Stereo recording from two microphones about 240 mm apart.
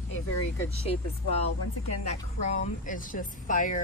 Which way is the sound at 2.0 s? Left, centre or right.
Left.